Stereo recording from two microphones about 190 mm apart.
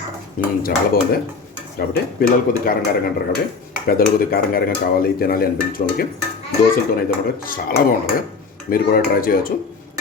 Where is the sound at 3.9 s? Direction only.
50° left (ahead or behind).